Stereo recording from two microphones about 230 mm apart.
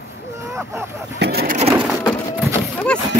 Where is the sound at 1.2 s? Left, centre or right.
Right.